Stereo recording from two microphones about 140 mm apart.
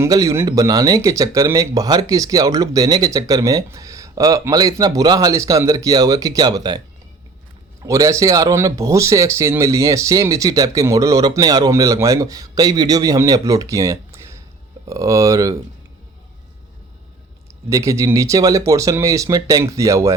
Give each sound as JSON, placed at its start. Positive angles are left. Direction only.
{"t": 0.0, "sound": "speech", "side_deg": -25}
{"t": 17.7, "sound": "speech", "side_deg": -20}